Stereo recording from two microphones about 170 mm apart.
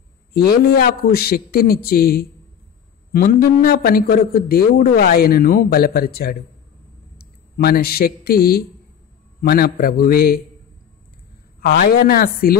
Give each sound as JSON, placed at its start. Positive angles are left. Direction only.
{"t": 0.3, "sound": "a man's voice", "side_deg": 60}
{"t": 11.6, "sound": "a man's voice", "side_deg": 65}